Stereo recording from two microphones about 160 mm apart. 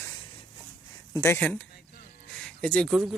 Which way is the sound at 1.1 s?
15° left (ahead or behind).